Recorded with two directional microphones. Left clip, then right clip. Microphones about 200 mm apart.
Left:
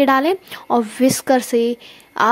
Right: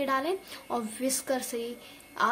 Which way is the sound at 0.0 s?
45° left (ahead or behind).